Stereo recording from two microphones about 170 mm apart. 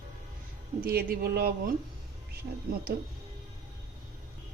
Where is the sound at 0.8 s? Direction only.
60° right (ahead or behind).